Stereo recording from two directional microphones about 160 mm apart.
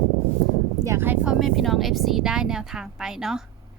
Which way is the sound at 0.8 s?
15° right (ahead or behind).